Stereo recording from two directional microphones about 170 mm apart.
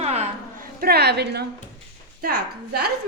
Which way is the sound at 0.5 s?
60° right (ahead or behind).